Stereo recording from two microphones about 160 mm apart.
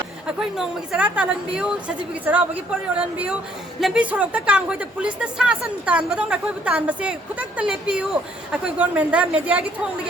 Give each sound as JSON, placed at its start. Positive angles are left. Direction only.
{"t": 0.3, "sound": "a woman's voice", "side_deg": -5}
{"t": 2.9, "sound": "speech", "side_deg": -5}